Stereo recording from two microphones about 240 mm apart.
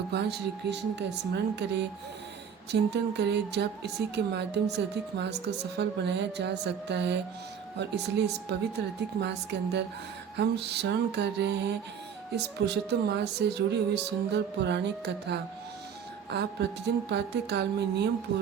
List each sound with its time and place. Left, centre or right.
0.1 s speech: right
2.9 s speech: right